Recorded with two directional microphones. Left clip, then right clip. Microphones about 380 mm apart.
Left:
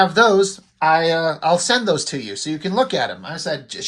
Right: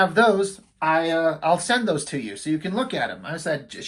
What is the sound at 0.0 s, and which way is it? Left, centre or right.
Speech, centre.